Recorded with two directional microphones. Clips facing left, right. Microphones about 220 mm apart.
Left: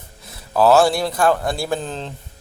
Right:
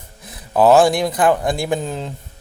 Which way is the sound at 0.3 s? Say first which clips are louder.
Right 2 dB; 20° right (ahead or behind).